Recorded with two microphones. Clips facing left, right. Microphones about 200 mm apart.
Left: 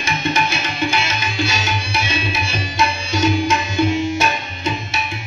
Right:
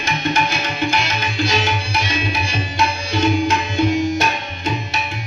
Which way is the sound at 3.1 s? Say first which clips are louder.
Even; 60° right (ahead or behind).